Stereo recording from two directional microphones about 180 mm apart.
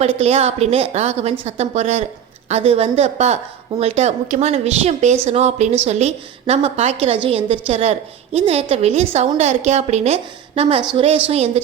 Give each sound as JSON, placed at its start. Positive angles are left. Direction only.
{"t": 0.0, "sound": "a woman's voice", "side_deg": -35}